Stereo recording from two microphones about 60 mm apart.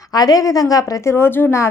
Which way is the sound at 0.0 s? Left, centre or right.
Left.